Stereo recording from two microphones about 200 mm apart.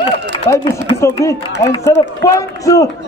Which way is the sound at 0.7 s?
15° left (ahead or behind).